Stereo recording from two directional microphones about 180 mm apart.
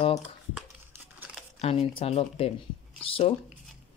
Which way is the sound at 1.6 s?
35° left (ahead or behind).